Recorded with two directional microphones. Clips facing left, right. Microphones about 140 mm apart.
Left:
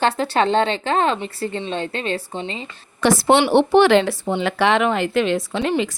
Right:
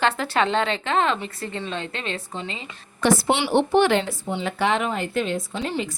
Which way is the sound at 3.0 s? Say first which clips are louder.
Left 5 dB; 85° left.